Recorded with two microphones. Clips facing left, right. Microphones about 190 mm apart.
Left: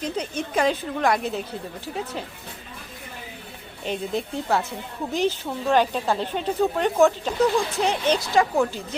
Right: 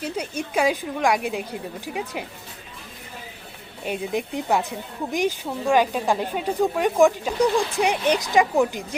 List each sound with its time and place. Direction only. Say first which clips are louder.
0.0 s a woman's voice: left 1 dB; 10° right (ahead or behind)
3.8 s a woman's voice: right 1 dB; 15° right (ahead or behind)